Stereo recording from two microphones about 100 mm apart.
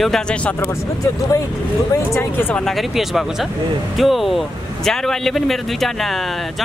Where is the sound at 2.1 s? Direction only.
20° left (ahead or behind).